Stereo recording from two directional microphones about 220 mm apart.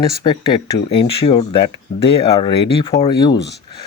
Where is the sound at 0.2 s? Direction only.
20° left (ahead or behind).